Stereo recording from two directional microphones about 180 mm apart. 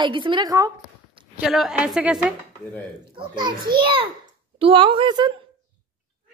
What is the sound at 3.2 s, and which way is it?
Speech, 25° right (ahead or behind).